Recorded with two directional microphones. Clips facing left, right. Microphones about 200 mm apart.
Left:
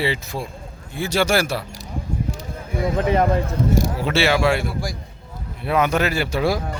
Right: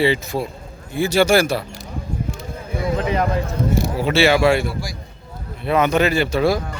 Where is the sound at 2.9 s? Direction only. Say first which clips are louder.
Left 3 dB; 50° left (ahead or behind).